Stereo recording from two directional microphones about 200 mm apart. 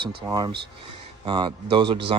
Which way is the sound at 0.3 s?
20° right (ahead or behind).